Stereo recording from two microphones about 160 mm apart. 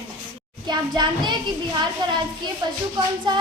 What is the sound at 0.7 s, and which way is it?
A child's voice, 25° right (ahead or behind).